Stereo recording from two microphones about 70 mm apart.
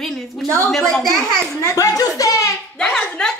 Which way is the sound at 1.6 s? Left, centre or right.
Left.